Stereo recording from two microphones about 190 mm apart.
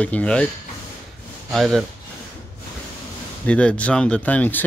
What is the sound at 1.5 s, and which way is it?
Speech, centre (ahead or behind).